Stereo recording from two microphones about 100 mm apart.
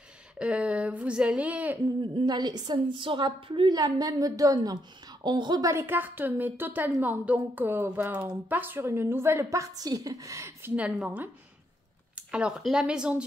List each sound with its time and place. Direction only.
0.4 s speech: 10° right (ahead or behind)
2.1 s a woman's voice: 45° right (ahead or behind)
3.7 s a woman's voice: 35° right (ahead or behind)
5.2 s a woman's voice: 50° right (ahead or behind)
5.7 s a woman's voice: 25° right (ahead or behind)
12.2 s speech: 10° right (ahead or behind)